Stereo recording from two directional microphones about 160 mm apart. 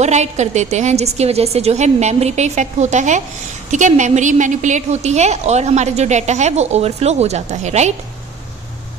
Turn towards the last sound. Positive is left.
turn(degrees=-45)  # may be behind; listen again after turning